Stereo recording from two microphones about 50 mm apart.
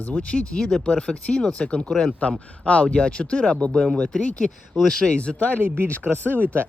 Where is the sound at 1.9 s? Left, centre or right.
Centre.